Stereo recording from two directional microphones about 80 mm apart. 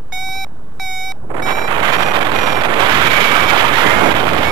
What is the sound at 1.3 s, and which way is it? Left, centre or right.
Vehicle, right.